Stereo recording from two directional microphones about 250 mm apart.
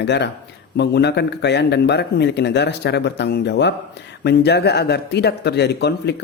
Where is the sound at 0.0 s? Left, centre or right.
Left.